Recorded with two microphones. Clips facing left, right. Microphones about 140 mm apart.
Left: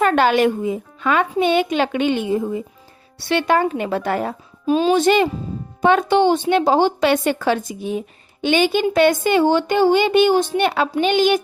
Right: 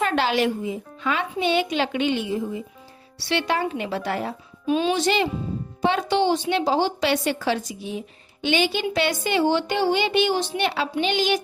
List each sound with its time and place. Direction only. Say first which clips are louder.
0.0 s a woman's voice: left 6 dB; 50° left (ahead or behind)
4.6 s a woman's voice: left 6 dB; 40° left (ahead or behind)